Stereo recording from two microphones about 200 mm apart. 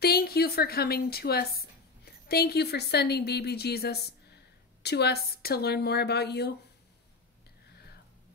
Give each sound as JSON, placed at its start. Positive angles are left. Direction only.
{"t": 0.0, "sound": "a woman's voice", "side_deg": 50}